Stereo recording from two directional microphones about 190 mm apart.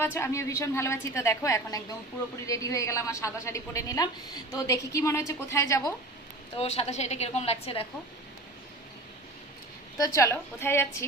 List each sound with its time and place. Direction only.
0.0 s a woman's voice: 15° left (ahead or behind)
6.6 s a woman's voice: 35° left (ahead or behind)
10.0 s a woman's voice: 15° left (ahead or behind)